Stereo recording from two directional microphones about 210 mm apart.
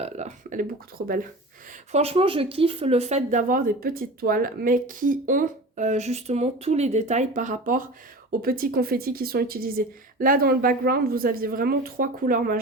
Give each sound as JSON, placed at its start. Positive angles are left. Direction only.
{"t": 0.0, "sound": "speech", "side_deg": -35}
{"t": 1.9, "sound": "speech", "side_deg": -30}